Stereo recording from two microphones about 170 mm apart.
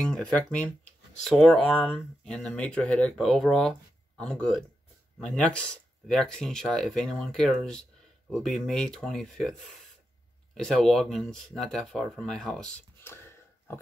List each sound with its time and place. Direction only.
0.0 s speech: 5° left (ahead or behind)